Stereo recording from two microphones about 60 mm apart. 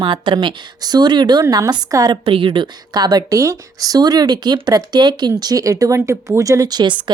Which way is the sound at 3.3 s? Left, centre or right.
Right.